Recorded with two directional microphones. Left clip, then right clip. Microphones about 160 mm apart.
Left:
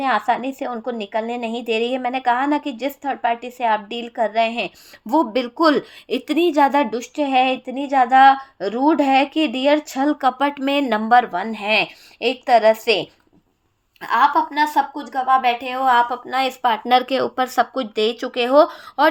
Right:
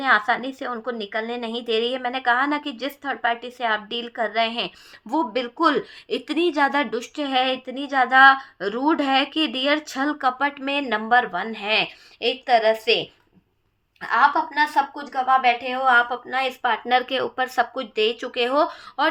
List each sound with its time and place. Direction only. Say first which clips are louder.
0.0 s a woman's voice: left 1 dB; 20° left (ahead or behind)